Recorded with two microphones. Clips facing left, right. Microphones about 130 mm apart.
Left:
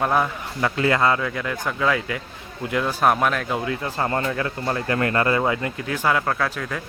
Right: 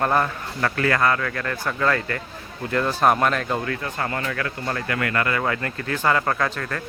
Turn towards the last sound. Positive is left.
turn(degrees=5)  # may be behind; listen again after turning